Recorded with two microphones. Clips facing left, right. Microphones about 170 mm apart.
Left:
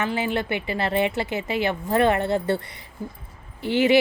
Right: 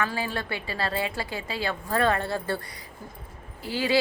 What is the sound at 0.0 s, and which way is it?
A woman's voice, 20° left (ahead or behind).